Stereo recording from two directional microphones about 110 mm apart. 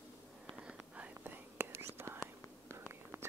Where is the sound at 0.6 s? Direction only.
10° right (ahead or behind).